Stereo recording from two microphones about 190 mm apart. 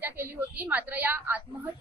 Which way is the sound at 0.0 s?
10° right (ahead or behind).